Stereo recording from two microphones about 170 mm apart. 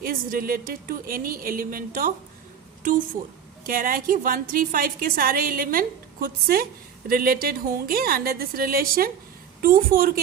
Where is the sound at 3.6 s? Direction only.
55° right (ahead or behind).